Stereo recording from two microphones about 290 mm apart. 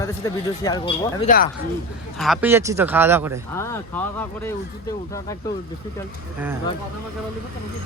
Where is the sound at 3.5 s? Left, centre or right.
Centre.